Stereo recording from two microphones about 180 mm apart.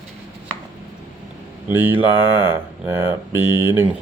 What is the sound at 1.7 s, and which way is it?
Speech, 10° right (ahead or behind).